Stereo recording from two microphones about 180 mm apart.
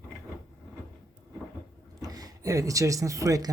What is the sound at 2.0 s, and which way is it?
Speech, 20° right (ahead or behind).